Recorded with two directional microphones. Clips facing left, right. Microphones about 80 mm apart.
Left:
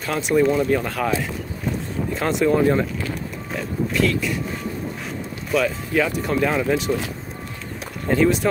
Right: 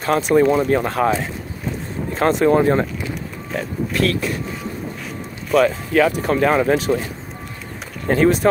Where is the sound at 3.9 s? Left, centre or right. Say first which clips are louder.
Right 1 dB; right.